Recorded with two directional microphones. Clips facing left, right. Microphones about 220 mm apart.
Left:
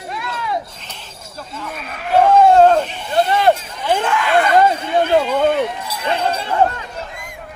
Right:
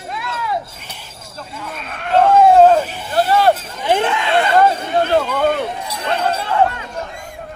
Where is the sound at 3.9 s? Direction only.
20° right (ahead or behind).